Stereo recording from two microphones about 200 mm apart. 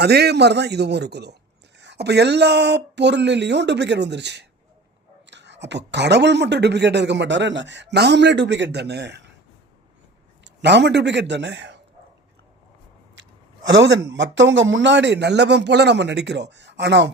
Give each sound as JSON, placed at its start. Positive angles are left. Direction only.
{"t": 0.0, "sound": "speech", "side_deg": -55}
{"t": 10.4, "sound": "a man's voice", "side_deg": -60}
{"t": 14.1, "sound": "speech", "side_deg": -65}